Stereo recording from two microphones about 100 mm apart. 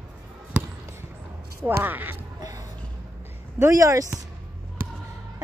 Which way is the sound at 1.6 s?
20° right (ahead or behind).